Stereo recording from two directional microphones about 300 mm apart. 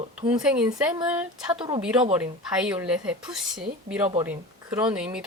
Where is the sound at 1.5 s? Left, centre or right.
Centre.